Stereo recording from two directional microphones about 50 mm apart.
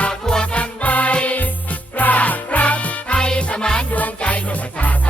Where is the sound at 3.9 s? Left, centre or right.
Left.